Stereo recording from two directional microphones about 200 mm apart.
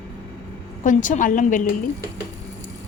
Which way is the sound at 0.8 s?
40° left (ahead or behind).